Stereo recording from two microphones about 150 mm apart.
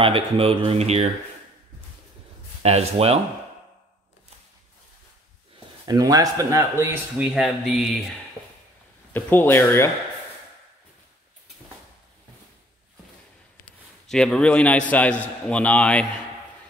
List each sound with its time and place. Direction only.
0.0 s speech: 35° right (ahead or behind)
2.6 s speech: 45° right (ahead or behind)
5.9 s a man's voice: 25° right (ahead or behind); by 7.9 s 5° right (ahead or behind)
9.1 s a man's voice: 15° left (ahead or behind)
14.0 s a man's voice: 5° left (ahead or behind)